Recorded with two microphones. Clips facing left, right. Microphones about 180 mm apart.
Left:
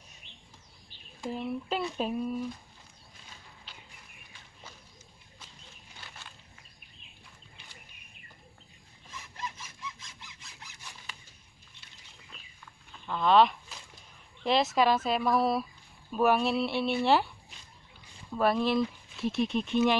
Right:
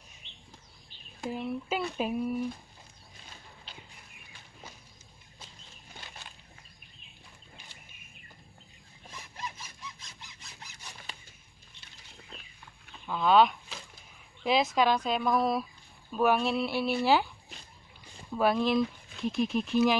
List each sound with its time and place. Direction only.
0.2 s bird: 25° right (ahead or behind)
1.3 s speech: centre (ahead or behind)
6.0 s a sound: 20° right (ahead or behind)
9.6 s sawing: 40° right (ahead or behind)
13.0 s speech: 5° right (ahead or behind)
18.3 s speech: centre (ahead or behind)